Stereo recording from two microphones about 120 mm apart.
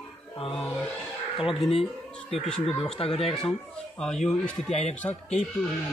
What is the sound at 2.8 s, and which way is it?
Speech, 50° left (ahead or behind).